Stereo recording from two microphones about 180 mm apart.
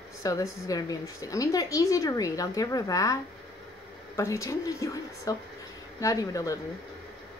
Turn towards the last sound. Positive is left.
turn(degrees=20)  # may be behind; listen again after turning